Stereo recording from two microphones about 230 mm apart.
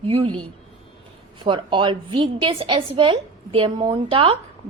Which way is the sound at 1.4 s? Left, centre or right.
Right.